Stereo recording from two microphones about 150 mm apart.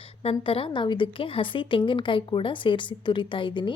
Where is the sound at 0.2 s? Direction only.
40° left (ahead or behind).